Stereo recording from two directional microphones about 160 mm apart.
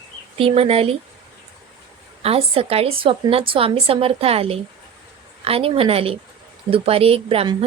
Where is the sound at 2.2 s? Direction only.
40° right (ahead or behind).